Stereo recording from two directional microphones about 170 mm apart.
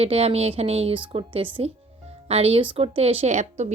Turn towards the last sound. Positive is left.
turn(degrees=-40)  # may be behind; listen again after turning